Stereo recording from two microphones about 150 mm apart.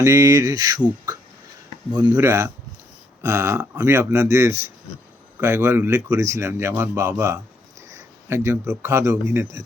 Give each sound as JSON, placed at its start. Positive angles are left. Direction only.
{"t": 0.0, "sound": "speech", "side_deg": -20}
{"t": 2.0, "sound": "a man's voice", "side_deg": -20}